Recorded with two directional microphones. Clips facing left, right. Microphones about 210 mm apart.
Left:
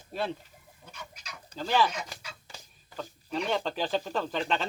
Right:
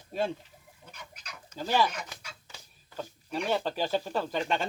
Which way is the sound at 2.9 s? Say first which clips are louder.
Left 1 dB; 10° right (ahead or behind).